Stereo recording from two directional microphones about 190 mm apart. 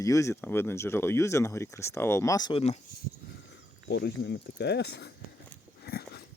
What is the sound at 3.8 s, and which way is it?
Speech, 65° left (ahead or behind).